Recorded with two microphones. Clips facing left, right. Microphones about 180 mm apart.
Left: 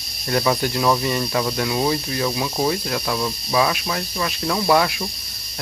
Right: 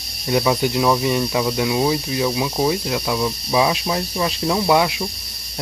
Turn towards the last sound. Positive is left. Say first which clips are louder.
# right 1 dB
turn(degrees=-15)  # may be behind; listen again after turning